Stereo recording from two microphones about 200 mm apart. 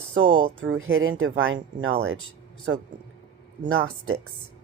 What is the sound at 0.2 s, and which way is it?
Speech, 25° right (ahead or behind).